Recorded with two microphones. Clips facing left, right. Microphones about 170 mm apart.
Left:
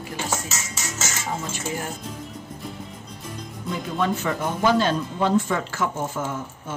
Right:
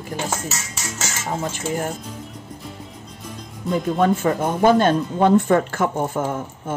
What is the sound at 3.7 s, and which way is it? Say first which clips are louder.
Speech: right 6 dB; 45° right (ahead or behind).